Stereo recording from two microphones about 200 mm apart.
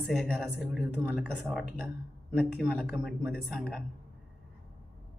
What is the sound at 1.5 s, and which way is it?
A man's voice, centre (ahead or behind).